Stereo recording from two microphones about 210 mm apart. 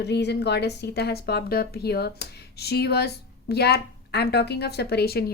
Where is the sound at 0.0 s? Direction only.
55° left (ahead or behind).